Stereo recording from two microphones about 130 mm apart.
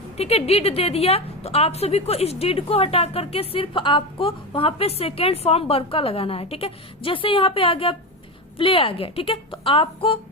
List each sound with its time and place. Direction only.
0.2 s a woman's voice: 50° left (ahead or behind)